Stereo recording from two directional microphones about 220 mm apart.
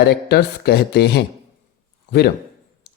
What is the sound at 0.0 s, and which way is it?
Speech, 45° left (ahead or behind).